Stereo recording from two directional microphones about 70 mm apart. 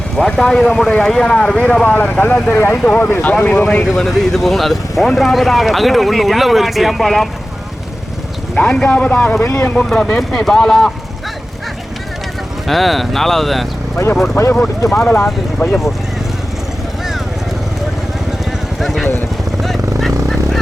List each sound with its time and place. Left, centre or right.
0.2 s speech: centre; by 2.4 s left
2.5 s speech: left
2.7 s speech: centre
3.8 s speech: centre
8.7 s speech: centre
10.2 s speech: centre
12.6 s speech: centre
14.2 s speech: left
18.8 s vehicle: centre